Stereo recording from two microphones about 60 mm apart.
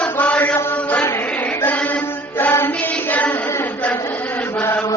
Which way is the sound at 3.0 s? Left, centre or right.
Left.